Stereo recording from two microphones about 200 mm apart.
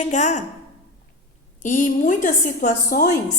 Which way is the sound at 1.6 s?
40° left (ahead or behind).